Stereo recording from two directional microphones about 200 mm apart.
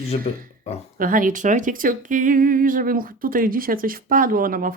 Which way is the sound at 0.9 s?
45° right (ahead or behind).